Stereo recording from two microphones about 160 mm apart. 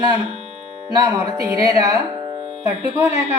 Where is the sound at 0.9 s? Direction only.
20° right (ahead or behind).